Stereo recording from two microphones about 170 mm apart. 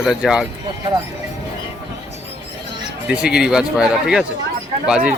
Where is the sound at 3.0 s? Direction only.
5° right (ahead or behind).